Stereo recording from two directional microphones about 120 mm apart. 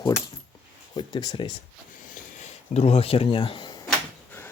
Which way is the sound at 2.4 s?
60° left (ahead or behind).